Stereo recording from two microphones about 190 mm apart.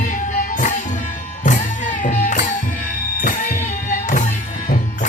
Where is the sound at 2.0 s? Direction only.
40° left (ahead or behind).